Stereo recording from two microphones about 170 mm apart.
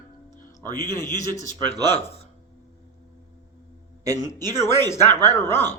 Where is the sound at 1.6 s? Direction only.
25° right (ahead or behind).